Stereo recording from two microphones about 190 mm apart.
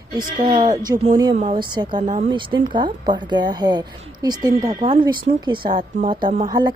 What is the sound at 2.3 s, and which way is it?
A woman's voice, 25° right (ahead or behind).